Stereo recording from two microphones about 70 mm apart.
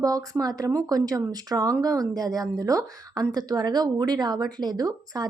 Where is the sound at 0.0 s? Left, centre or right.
Right.